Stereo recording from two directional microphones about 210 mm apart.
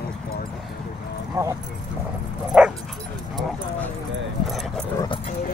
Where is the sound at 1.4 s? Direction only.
15° right (ahead or behind).